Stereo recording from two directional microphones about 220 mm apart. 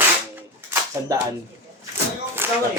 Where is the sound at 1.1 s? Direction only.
15° right (ahead or behind).